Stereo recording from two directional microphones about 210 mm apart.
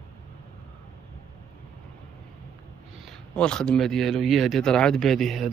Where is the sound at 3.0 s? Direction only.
5° left (ahead or behind).